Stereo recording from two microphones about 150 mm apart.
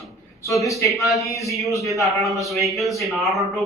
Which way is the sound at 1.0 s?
Centre (ahead or behind).